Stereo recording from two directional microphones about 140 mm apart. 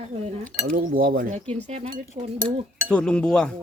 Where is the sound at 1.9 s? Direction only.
65° right (ahead or behind).